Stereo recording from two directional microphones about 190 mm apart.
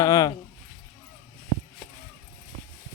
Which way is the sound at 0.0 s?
20° left (ahead or behind).